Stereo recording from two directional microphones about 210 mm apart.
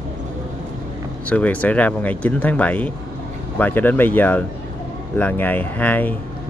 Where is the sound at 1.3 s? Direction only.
5° left (ahead or behind).